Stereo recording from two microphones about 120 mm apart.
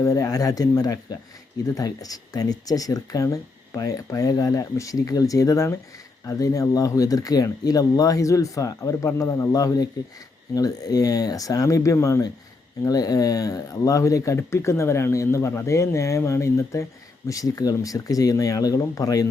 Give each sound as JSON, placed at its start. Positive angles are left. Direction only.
{"t": 0.0, "sound": "speech", "side_deg": 30}